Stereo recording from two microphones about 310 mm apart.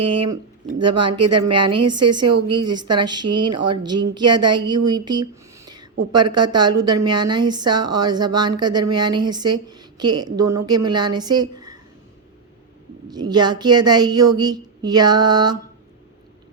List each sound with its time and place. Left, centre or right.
0.0 s speech: centre
0.9 s speech: right
2.0 s a woman's voice: centre
13.1 s speech: centre